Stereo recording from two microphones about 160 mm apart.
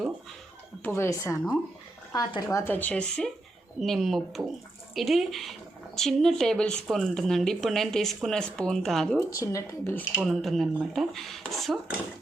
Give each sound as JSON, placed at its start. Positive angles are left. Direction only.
{"t": 0.9, "sound": "speech", "side_deg": 15}
{"t": 9.4, "sound": "speech", "side_deg": 20}
{"t": 10.2, "sound": "speech", "side_deg": 0}